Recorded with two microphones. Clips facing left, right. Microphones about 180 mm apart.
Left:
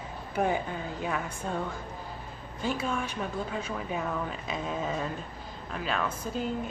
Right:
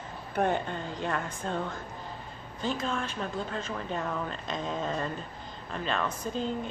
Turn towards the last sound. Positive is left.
turn(degrees=5)  # may be behind; listen again after turning